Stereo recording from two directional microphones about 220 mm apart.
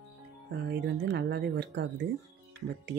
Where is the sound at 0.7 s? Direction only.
50° right (ahead or behind).